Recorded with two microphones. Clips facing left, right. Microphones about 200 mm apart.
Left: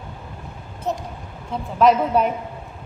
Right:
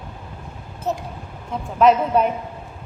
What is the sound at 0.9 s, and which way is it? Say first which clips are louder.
Speech: right 1 dB; centre (ahead or behind).